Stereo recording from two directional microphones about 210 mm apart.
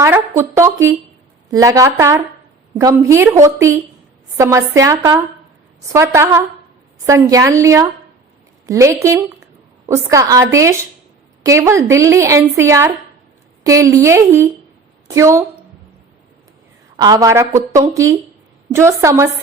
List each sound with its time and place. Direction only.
0.0 s a woman's voice: 10° right (ahead or behind)
17.0 s a woman's voice: 15° right (ahead or behind)